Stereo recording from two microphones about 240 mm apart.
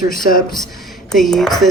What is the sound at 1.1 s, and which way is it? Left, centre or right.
Speech, centre.